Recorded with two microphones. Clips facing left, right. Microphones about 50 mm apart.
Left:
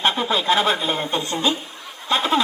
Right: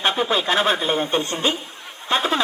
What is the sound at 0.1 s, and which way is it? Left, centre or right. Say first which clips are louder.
A woman's voice: even; right.